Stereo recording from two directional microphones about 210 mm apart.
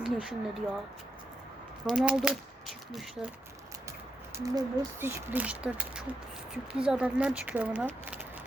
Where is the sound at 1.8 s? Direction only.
Centre (ahead or behind).